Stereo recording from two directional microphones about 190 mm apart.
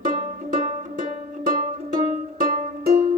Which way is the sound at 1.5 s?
45° right (ahead or behind).